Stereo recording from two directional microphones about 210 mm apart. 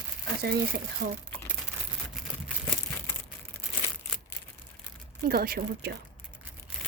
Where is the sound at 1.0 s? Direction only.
40° right (ahead or behind).